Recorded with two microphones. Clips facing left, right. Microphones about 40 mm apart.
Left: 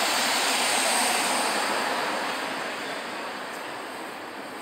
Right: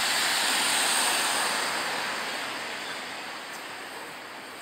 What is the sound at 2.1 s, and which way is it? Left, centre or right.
Vehicle, left.